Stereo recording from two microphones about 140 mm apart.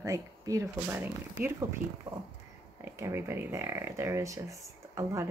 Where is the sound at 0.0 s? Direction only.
25° right (ahead or behind).